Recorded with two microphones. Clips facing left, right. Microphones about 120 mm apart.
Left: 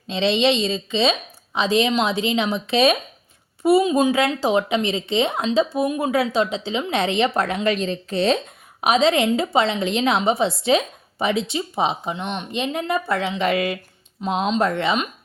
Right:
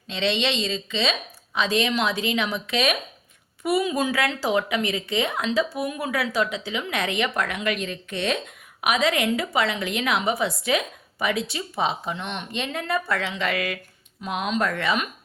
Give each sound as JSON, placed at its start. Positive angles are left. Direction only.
{"t": 0.1, "sound": "a woman's voice", "side_deg": 25}